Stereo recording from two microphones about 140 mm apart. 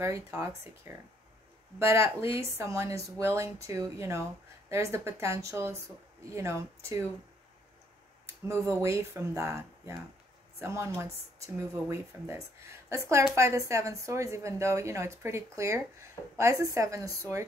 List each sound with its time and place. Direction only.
0.0 s speech: 20° right (ahead or behind)
1.8 s speech: 20° right (ahead or behind)
8.5 s speech: 20° right (ahead or behind)